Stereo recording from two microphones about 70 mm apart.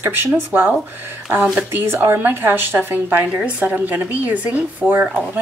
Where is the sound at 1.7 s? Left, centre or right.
Right.